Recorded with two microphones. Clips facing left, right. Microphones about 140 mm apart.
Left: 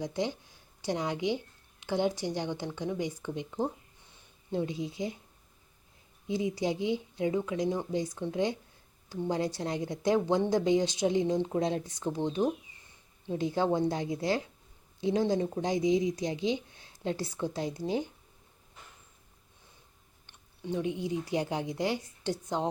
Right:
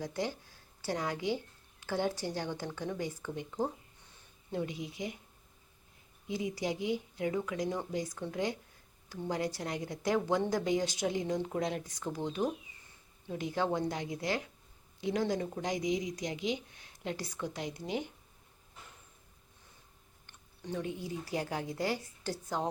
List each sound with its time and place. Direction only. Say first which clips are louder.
0.0 s speech: left 3 dB; 20° left (ahead or behind)
4.5 s speech: left 4 dB; 25° left (ahead or behind)
6.2 s speech: left 4 dB; 25° left (ahead or behind)
20.2 s speech: left 5 dB; 20° left (ahead or behind)